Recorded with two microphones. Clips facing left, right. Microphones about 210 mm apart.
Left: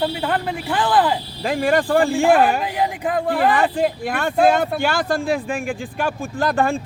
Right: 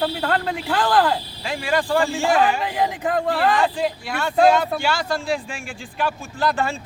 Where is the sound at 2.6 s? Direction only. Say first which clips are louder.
Left 1 dB; 10° left (ahead or behind).